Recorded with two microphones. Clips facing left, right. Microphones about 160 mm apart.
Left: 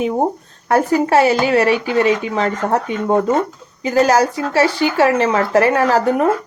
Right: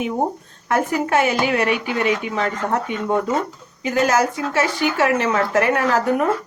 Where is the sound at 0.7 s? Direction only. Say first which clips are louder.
Left 5 dB; 35° left (ahead or behind).